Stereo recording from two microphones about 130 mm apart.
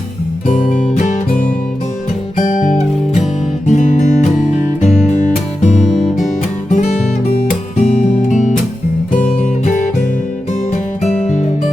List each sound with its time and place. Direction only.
0.4 s music: 75° left (ahead or behind)
2.4 s guitar: 70° left (ahead or behind)
5.0 s music: 65° left (ahead or behind)
7.8 s music: 55° left (ahead or behind)
11.0 s music: 65° left (ahead or behind)